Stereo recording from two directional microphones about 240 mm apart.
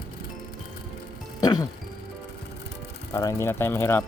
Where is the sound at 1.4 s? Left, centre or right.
Centre.